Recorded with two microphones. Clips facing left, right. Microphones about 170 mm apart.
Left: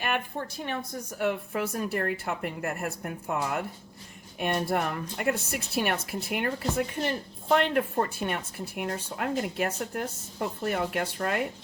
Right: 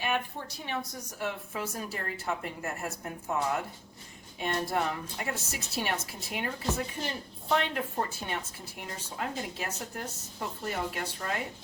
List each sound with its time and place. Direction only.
0.0 s a woman's voice: 60° left (ahead or behind)
4.4 s a woman's voice: 60° left (ahead or behind)